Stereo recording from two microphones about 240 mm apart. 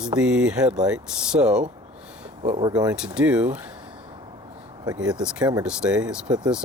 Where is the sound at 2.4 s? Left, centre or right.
Right.